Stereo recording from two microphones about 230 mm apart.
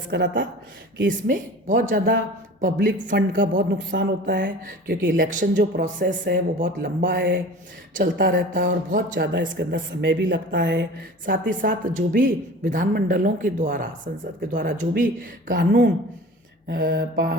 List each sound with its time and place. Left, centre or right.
0.1 s a woman's voice: right
1.1 s speech: right
3.9 s a woman's voice: right
4.3 s speech: right
9.2 s a woman's voice: right
11.3 s speech: right